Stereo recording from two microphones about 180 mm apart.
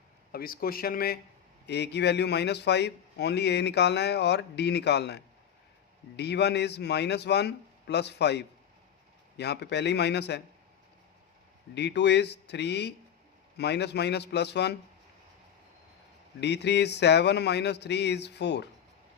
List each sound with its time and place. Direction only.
0.3 s speech: 55° left (ahead or behind)
1.6 s a man's voice: 70° left (ahead or behind)
11.7 s a man's voice: 70° left (ahead or behind)
16.4 s a man's voice: 70° left (ahead or behind)